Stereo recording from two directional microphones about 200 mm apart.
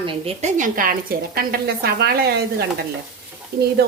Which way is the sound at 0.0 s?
25° right (ahead or behind).